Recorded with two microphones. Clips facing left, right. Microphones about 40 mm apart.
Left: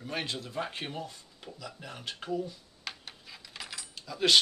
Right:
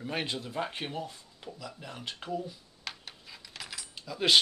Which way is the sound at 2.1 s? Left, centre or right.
Centre.